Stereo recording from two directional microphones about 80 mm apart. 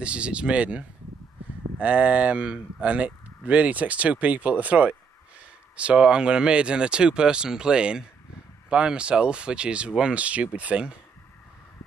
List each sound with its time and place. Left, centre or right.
0.0 s speech: centre